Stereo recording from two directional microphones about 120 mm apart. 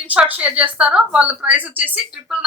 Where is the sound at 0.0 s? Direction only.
10° right (ahead or behind).